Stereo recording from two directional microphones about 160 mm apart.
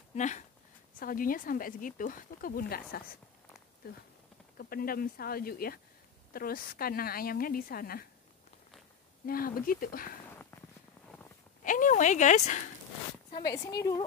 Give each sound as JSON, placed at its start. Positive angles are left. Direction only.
{"t": 0.1, "sound": "speech", "side_deg": 50}
{"t": 0.9, "sound": "speech", "side_deg": 60}
{"t": 4.6, "sound": "a woman's voice", "side_deg": 65}
{"t": 9.2, "sound": "speech", "side_deg": 65}
{"t": 10.3, "sound": "a sound", "side_deg": 15}
{"t": 11.6, "sound": "speech", "side_deg": 55}
{"t": 13.5, "sound": "speech", "side_deg": 25}